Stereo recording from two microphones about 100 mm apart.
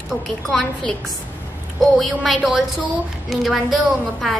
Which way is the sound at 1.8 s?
Centre (ahead or behind).